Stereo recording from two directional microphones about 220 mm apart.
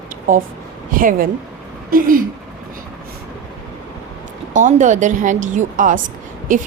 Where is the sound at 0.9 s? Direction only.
40° right (ahead or behind).